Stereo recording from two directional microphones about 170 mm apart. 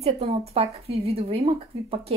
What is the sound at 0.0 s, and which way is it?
Speech, 35° right (ahead or behind).